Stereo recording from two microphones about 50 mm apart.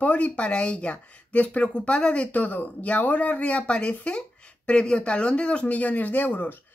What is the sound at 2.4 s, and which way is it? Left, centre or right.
Speech, left.